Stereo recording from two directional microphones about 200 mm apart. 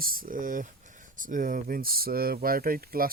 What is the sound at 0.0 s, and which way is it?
Speech, 45° right (ahead or behind).